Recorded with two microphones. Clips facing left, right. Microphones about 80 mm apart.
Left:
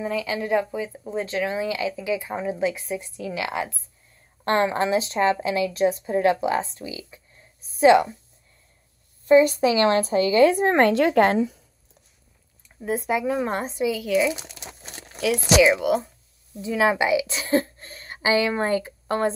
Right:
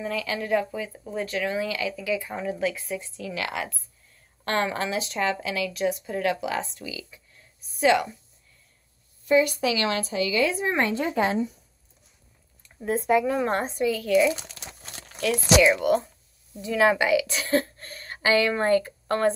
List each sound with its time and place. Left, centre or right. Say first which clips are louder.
0.0 s speech: left 3 dB; centre
9.2 s a woman's voice: left 5 dB; left
11.0 s speech: left 7 dB; left
12.8 s speech: right 2 dB; centre
16.6 s a woman's voice: even; centre